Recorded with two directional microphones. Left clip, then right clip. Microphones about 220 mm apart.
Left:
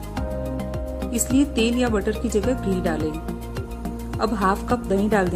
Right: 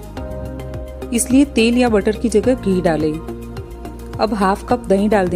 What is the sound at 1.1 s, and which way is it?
Speech, 25° right (ahead or behind).